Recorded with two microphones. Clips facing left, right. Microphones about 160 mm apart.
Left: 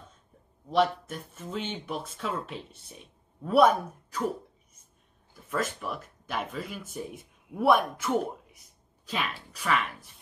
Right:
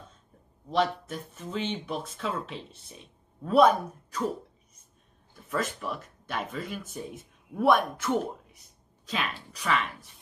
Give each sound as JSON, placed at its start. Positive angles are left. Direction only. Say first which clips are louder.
{"t": 0.7, "sound": "speech", "louder": "left 2 dB", "side_deg": 5}
{"t": 5.3, "sound": "speech", "louder": "even", "side_deg": 0}